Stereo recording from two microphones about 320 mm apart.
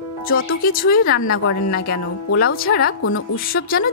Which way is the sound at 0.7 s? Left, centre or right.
Left.